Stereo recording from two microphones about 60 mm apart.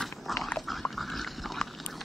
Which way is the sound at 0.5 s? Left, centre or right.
Centre.